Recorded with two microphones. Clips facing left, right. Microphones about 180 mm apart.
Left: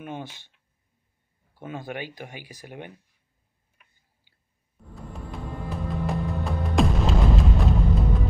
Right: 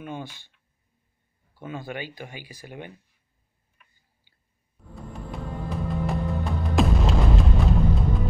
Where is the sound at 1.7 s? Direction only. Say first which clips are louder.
Even; centre (ahead or behind).